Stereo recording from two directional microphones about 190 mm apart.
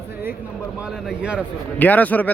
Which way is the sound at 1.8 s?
10° left (ahead or behind).